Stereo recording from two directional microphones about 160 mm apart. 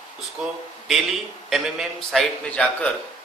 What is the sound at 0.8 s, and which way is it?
A man's voice, centre (ahead or behind).